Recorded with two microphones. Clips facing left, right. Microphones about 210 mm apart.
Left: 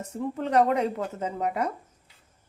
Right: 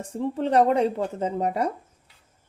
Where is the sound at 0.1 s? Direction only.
30° right (ahead or behind).